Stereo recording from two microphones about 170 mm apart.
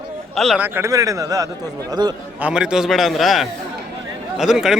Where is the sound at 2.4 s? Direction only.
5° right (ahead or behind).